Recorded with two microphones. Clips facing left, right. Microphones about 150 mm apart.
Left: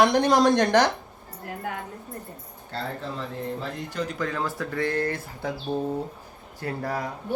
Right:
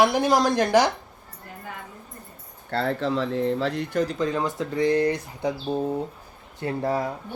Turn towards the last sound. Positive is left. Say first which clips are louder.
# right 4 dB
turn(degrees=-25)  # may be behind; listen again after turning